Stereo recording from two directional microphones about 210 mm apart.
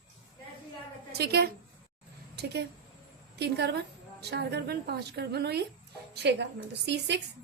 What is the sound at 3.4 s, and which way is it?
A woman's voice, 50° right (ahead or behind).